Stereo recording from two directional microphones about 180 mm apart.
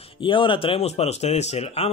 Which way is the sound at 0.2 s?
30° left (ahead or behind).